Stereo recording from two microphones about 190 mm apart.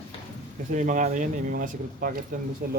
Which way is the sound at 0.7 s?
40° right (ahead or behind).